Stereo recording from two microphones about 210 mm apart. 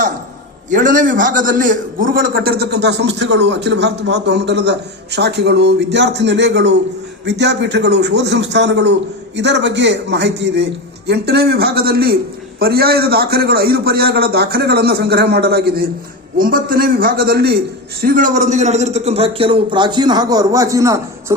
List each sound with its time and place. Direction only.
0.7 s a man's voice: 40° right (ahead or behind); by 21.3 s 15° right (ahead or behind)